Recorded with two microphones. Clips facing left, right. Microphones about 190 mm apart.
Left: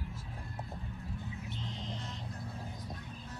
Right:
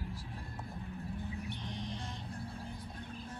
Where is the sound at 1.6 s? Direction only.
20° left (ahead or behind).